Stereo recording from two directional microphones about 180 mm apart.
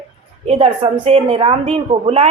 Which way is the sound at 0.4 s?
35° right (ahead or behind).